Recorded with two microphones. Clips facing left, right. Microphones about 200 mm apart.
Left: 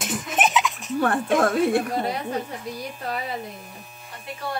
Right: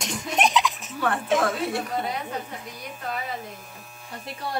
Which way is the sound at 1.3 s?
50° left (ahead or behind).